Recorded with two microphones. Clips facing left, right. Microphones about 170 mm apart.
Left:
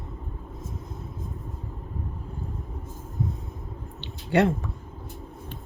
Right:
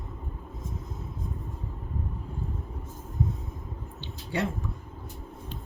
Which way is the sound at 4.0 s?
65° left (ahead or behind).